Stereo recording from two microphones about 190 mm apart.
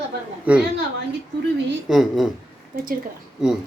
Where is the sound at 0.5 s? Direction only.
5° right (ahead or behind).